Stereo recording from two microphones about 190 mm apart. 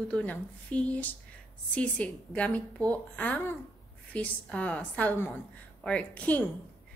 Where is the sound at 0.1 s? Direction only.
5° left (ahead or behind).